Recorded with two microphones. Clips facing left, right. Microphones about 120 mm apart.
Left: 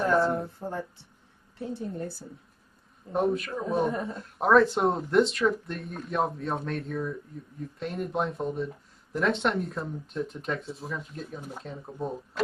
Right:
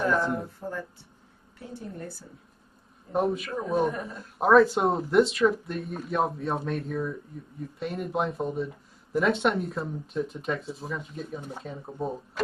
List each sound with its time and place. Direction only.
0.6 s speech: 25° left (ahead or behind)
3.1 s speech: centre (ahead or behind)